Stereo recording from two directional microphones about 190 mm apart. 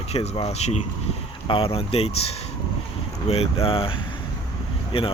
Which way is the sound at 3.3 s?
30° left (ahead or behind).